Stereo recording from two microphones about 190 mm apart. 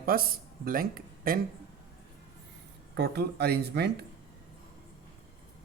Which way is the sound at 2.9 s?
60° right (ahead or behind).